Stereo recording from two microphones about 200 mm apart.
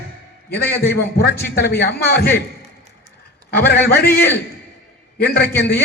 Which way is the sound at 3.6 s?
50° left (ahead or behind).